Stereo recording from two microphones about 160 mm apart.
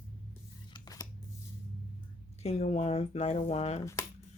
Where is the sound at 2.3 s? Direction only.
40° left (ahead or behind).